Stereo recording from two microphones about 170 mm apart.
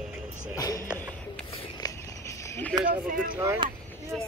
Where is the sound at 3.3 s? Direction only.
15° right (ahead or behind).